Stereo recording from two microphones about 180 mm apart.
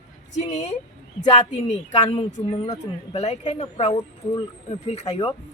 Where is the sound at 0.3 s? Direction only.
40° left (ahead or behind).